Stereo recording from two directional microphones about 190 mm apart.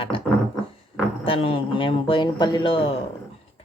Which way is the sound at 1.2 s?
30° left (ahead or behind).